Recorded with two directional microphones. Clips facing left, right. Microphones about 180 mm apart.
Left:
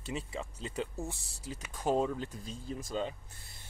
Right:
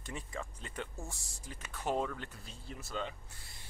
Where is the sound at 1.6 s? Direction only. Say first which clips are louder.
Left 4 dB; 10° left (ahead or behind).